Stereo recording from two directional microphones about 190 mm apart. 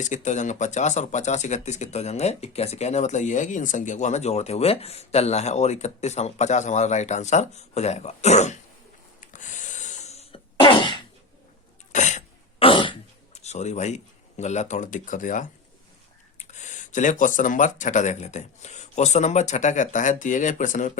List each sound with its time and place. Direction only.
0.0 s speech: 40° left (ahead or behind)
9.3 s cough: 40° left (ahead or behind); by 10.9 s 25° left (ahead or behind)
11.9 s throat clearing: 40° left (ahead or behind)
16.4 s speech: 40° left (ahead or behind)